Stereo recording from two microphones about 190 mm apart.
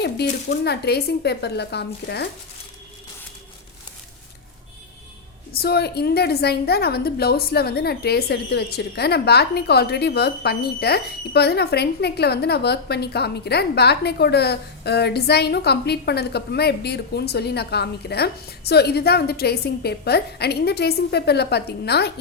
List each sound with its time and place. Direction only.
0.0 s a woman's voice: 60° left (ahead or behind)
5.5 s a woman's voice: 55° left (ahead or behind)